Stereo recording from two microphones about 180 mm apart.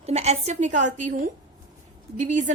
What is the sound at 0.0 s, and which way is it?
A woman's voice, 40° right (ahead or behind).